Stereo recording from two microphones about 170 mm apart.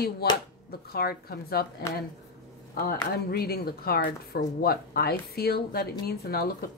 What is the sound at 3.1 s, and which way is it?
Speech, 65° left (ahead or behind).